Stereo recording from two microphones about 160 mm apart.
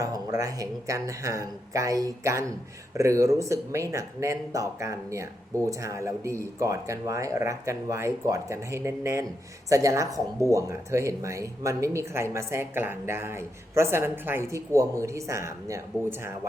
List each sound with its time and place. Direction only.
0.0 s speech: 20° right (ahead or behind)